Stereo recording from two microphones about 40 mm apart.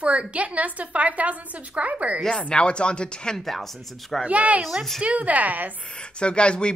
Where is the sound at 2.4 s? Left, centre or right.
Left.